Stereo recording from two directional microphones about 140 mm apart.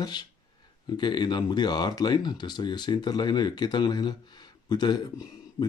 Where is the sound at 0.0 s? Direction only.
30° left (ahead or behind).